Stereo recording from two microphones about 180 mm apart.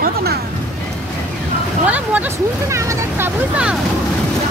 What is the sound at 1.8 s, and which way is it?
Vehicle, 10° right (ahead or behind).